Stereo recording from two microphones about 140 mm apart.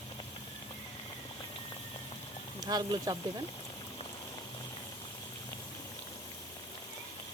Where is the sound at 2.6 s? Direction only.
30° right (ahead or behind).